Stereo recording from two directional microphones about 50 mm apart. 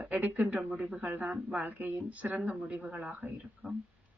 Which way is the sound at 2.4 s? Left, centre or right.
Centre.